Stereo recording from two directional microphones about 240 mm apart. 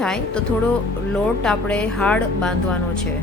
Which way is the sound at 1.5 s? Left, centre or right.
Centre.